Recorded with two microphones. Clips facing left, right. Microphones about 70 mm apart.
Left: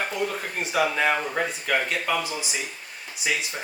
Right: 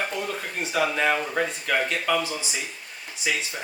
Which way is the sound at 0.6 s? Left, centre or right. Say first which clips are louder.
Left 1 dB; centre.